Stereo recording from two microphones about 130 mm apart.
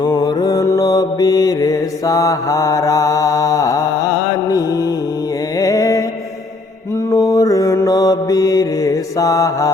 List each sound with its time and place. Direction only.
0.0 s mantra: 30° left (ahead or behind)
4.4 s music: 30° left (ahead or behind)
5.5 s mantra: 25° left (ahead or behind)
7.1 s mantra: 25° left (ahead or behind)